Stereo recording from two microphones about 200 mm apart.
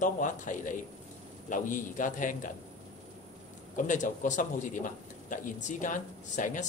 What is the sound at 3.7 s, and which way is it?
A man's voice, 40° left (ahead or behind).